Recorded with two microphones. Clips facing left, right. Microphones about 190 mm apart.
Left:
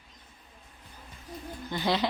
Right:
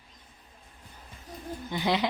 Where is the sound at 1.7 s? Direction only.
15° right (ahead or behind).